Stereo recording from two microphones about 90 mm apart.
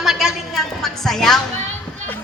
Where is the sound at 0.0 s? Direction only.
Centre (ahead or behind).